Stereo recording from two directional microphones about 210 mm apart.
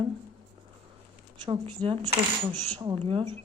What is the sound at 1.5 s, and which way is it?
Speech, 25° right (ahead or behind).